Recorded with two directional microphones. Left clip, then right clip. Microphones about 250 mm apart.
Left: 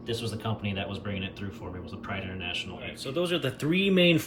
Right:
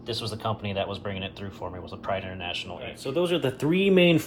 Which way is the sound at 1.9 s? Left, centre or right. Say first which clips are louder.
Right 7 dB; right.